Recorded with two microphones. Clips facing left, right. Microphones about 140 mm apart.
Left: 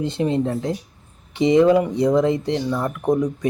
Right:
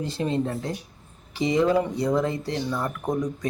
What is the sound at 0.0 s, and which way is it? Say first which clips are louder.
Speech: left 5 dB; 20° left (ahead or behind).